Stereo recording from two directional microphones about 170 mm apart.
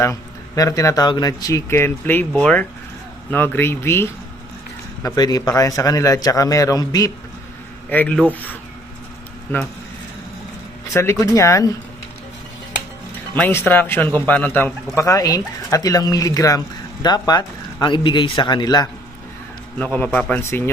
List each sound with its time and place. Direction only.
0.0 s speech: 20° left (ahead or behind)
7.9 s speech: 10° left (ahead or behind)
10.8 s speech: 15° left (ahead or behind)
13.3 s speech: 10° left (ahead or behind)
19.8 s speech: 10° left (ahead or behind)